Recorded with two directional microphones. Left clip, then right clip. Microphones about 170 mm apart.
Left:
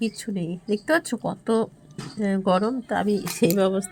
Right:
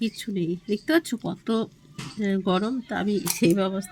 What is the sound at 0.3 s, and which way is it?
Speech, 15° left (ahead or behind).